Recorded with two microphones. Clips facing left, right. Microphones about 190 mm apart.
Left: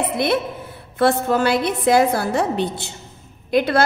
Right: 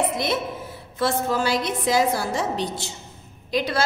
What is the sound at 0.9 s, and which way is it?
A woman's voice, 60° left (ahead or behind).